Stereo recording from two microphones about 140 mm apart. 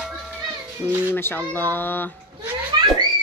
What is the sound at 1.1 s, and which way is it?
Speech, 15° left (ahead or behind).